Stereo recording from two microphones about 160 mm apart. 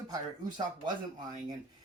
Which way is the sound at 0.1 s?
30° right (ahead or behind).